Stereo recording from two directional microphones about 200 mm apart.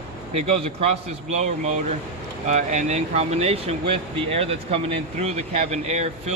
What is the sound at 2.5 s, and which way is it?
Speech, 35° right (ahead or behind).